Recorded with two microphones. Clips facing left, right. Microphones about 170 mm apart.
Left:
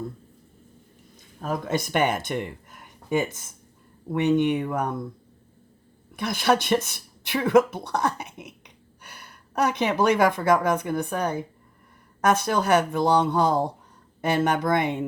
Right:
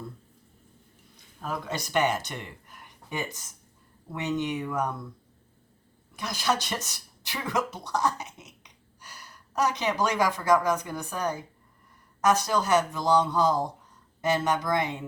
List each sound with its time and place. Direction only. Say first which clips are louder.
1.4 s speech: left 6 dB; 50° left (ahead or behind)
6.1 s speech: left 6 dB; 60° left (ahead or behind)